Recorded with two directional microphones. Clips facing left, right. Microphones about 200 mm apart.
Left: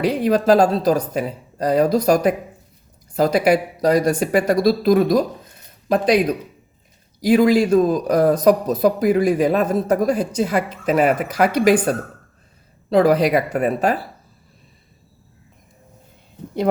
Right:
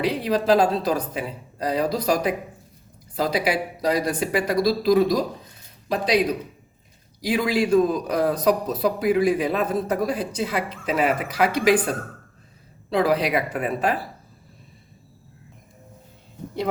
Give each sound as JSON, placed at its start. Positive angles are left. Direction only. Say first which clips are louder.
{"t": 0.0, "sound": "a man's voice", "louder": "left 5 dB", "side_deg": 50}
{"t": 7.2, "sound": "a man's voice", "louder": "left 8 dB", "side_deg": 45}
{"t": 12.9, "sound": "a man's voice", "louder": "left 6 dB", "side_deg": 45}